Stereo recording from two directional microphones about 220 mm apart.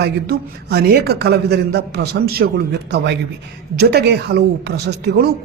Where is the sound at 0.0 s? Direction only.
45° right (ahead or behind).